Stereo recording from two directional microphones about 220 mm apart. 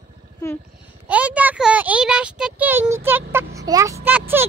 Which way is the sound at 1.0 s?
5° right (ahead or behind).